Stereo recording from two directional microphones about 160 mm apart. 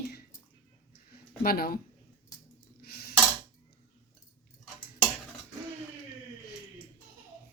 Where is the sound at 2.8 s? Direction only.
75° left (ahead or behind).